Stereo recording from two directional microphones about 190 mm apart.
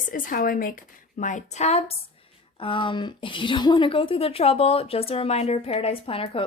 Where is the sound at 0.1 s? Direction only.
50° left (ahead or behind).